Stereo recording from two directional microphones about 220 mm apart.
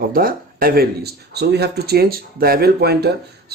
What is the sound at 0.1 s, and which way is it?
Speech, 40° right (ahead or behind).